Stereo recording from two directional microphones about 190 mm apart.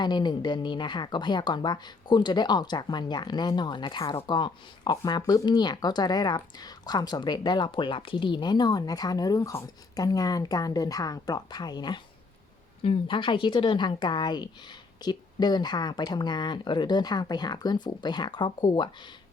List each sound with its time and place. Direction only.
0.0 s a woman's voice: 20° left (ahead or behind)